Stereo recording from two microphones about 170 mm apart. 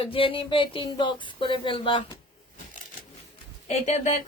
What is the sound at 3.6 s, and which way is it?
Speech, 40° left (ahead or behind).